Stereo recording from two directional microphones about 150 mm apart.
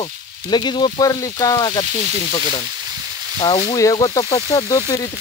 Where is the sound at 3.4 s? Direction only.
35° left (ahead or behind).